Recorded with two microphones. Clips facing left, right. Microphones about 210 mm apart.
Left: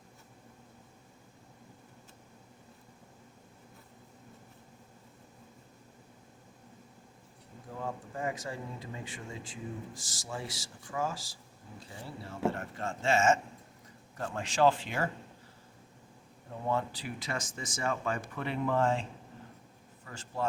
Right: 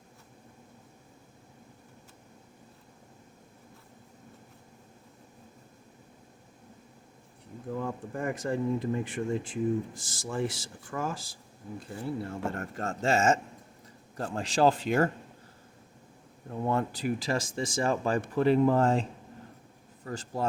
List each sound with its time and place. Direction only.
7.8 s speech: 55° right (ahead or behind)
16.6 s speech: 50° right (ahead or behind)
20.1 s speech: 40° right (ahead or behind)